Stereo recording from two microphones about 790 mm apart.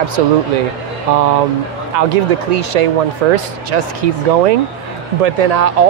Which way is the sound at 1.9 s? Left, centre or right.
Right.